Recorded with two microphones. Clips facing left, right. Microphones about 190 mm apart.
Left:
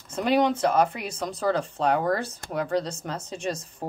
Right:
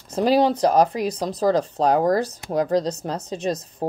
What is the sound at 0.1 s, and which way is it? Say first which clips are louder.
Speech: right 4 dB; 35° right (ahead or behind).